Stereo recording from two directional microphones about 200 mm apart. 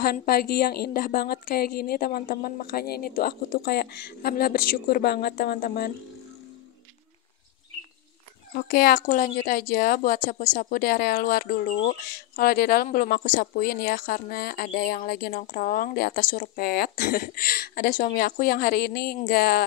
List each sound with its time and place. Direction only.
0.0 s speech: 50° left (ahead or behind)
8.5 s speech: 50° left (ahead or behind)